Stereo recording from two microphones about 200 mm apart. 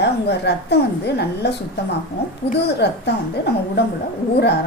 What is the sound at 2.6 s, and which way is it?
Speech, 55° left (ahead or behind).